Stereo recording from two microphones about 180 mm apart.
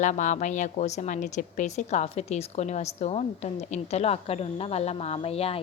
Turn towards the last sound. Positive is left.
turn(degrees=35)  # may be behind; listen again after turning